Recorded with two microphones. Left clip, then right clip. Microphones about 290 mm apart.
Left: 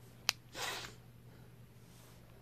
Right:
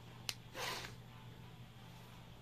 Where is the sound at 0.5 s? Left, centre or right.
Centre.